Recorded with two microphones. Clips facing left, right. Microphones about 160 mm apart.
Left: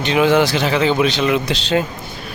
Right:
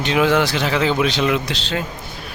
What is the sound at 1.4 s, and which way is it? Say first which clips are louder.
Speech: left 6 dB; 15° left (ahead or behind).